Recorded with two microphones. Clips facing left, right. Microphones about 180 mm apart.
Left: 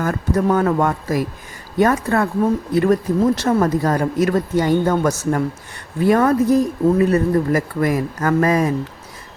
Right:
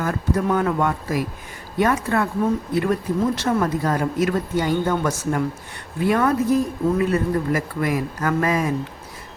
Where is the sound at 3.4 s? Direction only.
40° left (ahead or behind).